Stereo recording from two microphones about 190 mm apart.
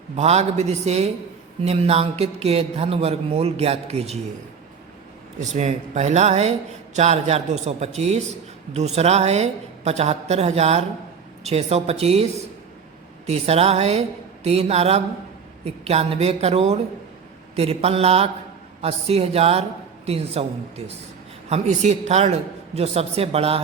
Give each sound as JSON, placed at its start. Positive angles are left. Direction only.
{"t": 0.2, "sound": "a man's voice", "side_deg": -35}
{"t": 5.4, "sound": "a man's voice", "side_deg": -40}